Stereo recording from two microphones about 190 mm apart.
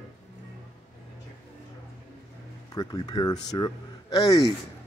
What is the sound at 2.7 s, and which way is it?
Speech, 20° left (ahead or behind).